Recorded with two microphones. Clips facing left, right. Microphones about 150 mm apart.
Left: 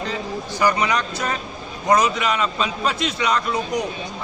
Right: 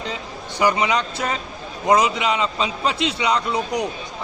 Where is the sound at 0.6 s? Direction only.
15° right (ahead or behind).